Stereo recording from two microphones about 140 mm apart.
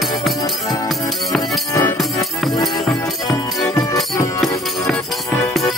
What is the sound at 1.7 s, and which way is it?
Music, 15° left (ahead or behind).